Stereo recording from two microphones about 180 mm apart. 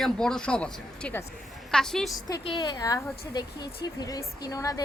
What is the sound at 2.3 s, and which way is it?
A woman's voice, 25° left (ahead or behind).